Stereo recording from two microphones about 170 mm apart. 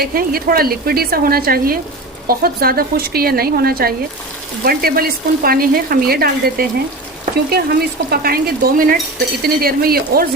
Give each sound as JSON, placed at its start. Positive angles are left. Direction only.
{"t": 0.0, "sound": "frying", "side_deg": -60}
{"t": 7.5, "sound": "stir", "side_deg": -65}
{"t": 8.1, "sound": "frying", "side_deg": -65}